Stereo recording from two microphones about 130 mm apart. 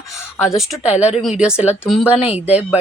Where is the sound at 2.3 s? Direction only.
55° left (ahead or behind).